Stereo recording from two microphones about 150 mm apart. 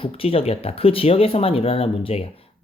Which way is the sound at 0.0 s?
40° left (ahead or behind).